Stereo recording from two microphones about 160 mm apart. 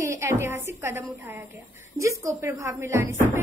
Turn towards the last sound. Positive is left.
turn(degrees=-15)  # may be behind; listen again after turning